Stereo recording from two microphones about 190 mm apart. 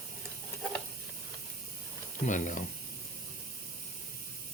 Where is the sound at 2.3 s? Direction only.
40° left (ahead or behind).